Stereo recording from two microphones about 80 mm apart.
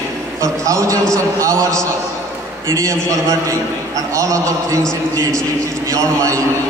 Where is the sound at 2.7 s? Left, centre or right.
Right.